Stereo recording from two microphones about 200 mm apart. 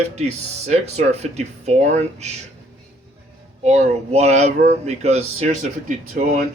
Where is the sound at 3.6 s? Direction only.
35° right (ahead or behind).